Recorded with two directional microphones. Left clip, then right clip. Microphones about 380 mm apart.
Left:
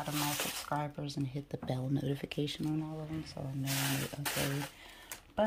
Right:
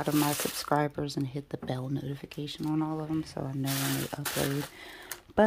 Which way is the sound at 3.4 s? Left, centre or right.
Centre.